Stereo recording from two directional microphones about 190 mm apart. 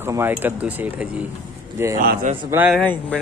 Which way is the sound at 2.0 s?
45° right (ahead or behind).